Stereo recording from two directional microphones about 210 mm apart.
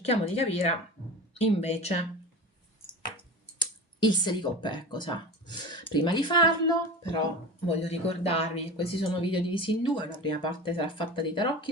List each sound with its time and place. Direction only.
0.1 s speech: 30° left (ahead or behind)
3.6 s speech: 20° left (ahead or behind)